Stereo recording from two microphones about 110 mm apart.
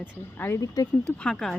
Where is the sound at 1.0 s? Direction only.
10° left (ahead or behind).